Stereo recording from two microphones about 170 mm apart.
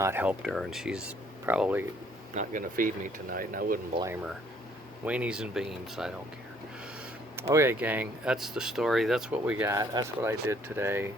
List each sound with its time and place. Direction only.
0.0 s speech: 10° right (ahead or behind)
2.3 s speech: 50° right (ahead or behind)
4.0 s speech: 10° right (ahead or behind)
7.3 s speech: 15° right (ahead or behind)